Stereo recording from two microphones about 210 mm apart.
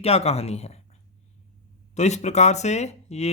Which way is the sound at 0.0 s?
30° left (ahead or behind).